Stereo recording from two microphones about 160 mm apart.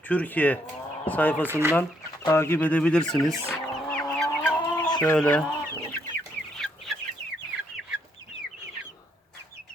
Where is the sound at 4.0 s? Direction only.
5° left (ahead or behind).